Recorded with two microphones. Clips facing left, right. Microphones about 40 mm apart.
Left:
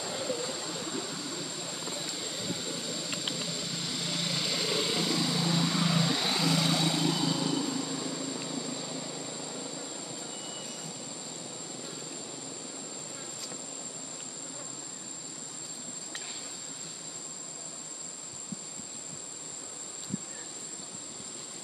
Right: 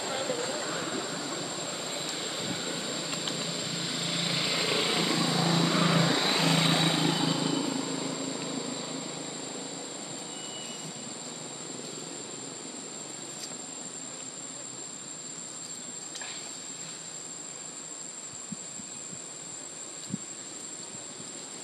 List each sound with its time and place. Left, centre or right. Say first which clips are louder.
0.0 s vehicle: right 2 dB; right
6.3 s vehicle: right 2 dB; right; by 10.8 s centre